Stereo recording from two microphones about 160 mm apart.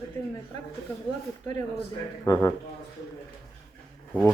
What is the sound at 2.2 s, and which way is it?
Speech, 15° left (ahead or behind).